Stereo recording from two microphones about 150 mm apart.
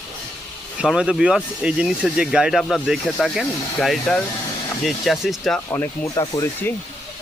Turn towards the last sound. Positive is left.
turn(degrees=20)  # may be behind; listen again after turning